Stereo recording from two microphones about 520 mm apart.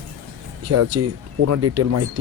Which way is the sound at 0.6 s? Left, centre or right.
Right.